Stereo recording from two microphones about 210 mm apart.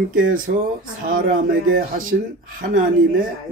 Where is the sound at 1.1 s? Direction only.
40° right (ahead or behind).